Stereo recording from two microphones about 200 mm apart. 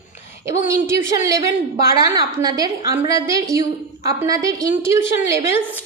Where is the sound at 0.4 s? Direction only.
15° right (ahead or behind).